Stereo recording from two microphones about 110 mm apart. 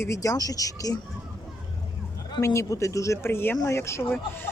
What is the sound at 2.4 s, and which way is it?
Speech, 25° left (ahead or behind).